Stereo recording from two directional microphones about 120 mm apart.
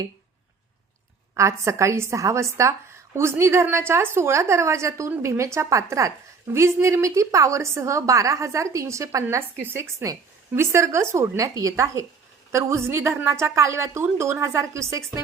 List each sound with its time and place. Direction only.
1.4 s a woman's voice: 25° right (ahead or behind)